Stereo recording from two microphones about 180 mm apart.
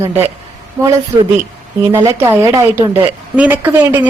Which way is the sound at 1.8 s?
15° right (ahead or behind).